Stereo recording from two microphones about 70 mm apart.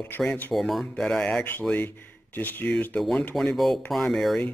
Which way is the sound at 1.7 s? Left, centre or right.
Left.